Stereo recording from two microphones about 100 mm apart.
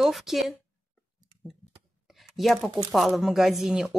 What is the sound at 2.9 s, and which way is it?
Speech, centre (ahead or behind).